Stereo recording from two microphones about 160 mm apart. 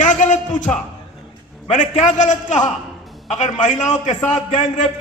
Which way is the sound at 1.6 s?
45° left (ahead or behind).